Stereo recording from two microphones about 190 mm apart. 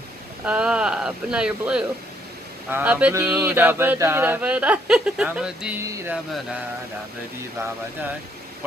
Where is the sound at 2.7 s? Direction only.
5° right (ahead or behind).